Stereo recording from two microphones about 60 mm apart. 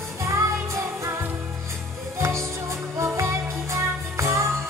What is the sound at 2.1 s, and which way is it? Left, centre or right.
Music, right.